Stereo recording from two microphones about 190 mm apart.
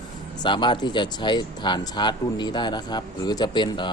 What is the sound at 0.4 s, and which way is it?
Speech, 25° left (ahead or behind).